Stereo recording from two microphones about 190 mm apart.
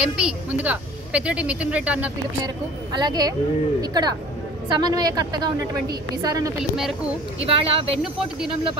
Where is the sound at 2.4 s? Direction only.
20° right (ahead or behind).